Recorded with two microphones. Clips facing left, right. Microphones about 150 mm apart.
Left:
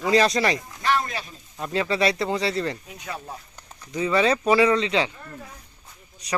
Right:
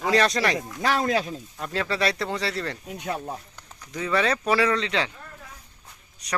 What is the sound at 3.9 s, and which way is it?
Speech, 5° left (ahead or behind).